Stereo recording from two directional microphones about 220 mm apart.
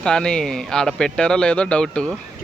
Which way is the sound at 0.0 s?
5° left (ahead or behind).